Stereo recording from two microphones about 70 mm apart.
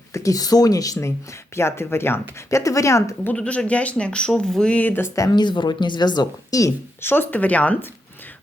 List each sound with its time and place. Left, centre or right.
0.1 s speech: left
1.5 s speech: left
2.6 s speech: left
3.3 s speech: centre
5.3 s speech: left
7.0 s speech: left